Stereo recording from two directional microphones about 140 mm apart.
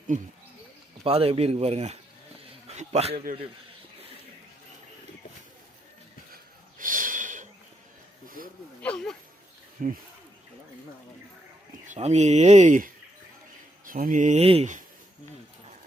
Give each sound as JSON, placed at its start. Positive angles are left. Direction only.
{"t": 1.0, "sound": "a man's voice", "side_deg": -45}
{"t": 6.3, "sound": "snort", "side_deg": -75}
{"t": 8.8, "sound": "speech", "side_deg": 5}
{"t": 9.8, "sound": "mantra", "side_deg": -70}
{"t": 11.9, "sound": "speech", "side_deg": -50}
{"t": 13.8, "sound": "mantra", "side_deg": -85}
{"t": 14.4, "sound": "speech", "side_deg": -40}